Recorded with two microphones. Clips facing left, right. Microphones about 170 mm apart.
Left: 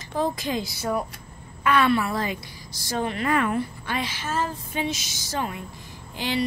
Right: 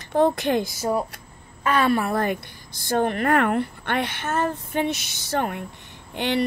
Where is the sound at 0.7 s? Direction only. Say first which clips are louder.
Right 3 dB; 40° right (ahead or behind).